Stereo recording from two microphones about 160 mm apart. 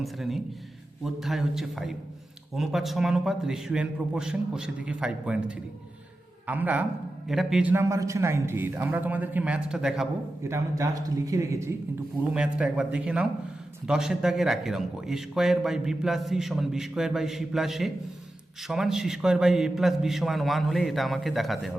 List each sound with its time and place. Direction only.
0.0 s a man's voice: centre (ahead or behind)
10.4 s a man's voice: 20° right (ahead or behind)
12.3 s a man's voice: 5° right (ahead or behind)